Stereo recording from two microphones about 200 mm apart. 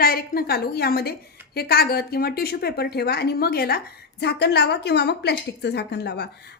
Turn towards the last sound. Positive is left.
turn(degrees=55)  # may be behind; listen again after turning